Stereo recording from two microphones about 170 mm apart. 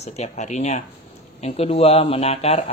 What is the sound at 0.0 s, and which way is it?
Speech, 40° left (ahead or behind).